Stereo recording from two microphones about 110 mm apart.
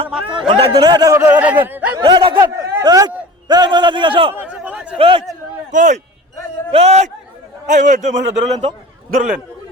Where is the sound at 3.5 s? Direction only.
40° right (ahead or behind).